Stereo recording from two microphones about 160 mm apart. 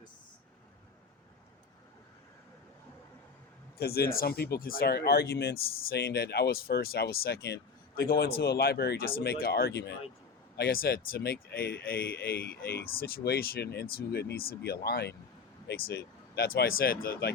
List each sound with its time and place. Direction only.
3.8 s speech: 75° left (ahead or behind)
8.4 s speech: 85° left
10.6 s speech: 70° left (ahead or behind)